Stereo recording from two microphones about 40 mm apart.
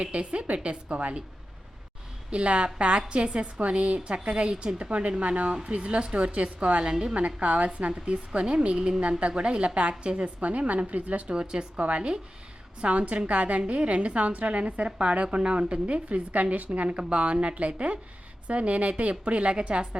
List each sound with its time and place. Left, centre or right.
0.0 s a woman's voice: right
2.3 s a woman's voice: right
11.3 s a woman's voice: right